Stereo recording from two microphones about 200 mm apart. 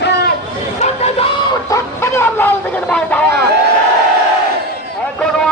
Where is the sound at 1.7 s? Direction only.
15° left (ahead or behind).